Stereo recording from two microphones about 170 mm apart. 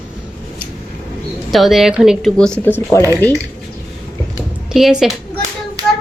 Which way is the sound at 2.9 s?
15° left (ahead or behind).